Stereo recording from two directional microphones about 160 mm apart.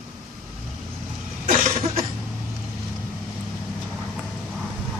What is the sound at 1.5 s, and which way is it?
Cough, 60° right (ahead or behind).